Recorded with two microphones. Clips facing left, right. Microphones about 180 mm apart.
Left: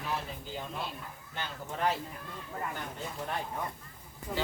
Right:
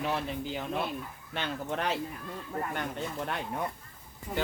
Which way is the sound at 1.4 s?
75° right (ahead or behind).